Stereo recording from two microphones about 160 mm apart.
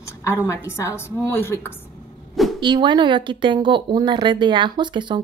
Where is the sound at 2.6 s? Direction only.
30° right (ahead or behind).